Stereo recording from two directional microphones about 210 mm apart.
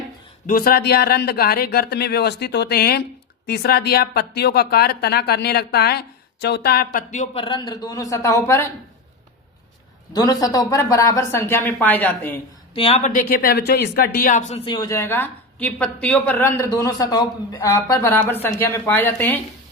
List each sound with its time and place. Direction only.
0.4 s a woman's voice: 45° left (ahead or behind)
7.4 s speech: 20° left (ahead or behind)
10.2 s speech: 15° left (ahead or behind)
12.7 s speech: 30° left (ahead or behind); by 19.4 s 10° left (ahead or behind)